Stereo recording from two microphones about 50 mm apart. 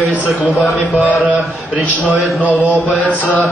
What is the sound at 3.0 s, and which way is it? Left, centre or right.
Mantra, left.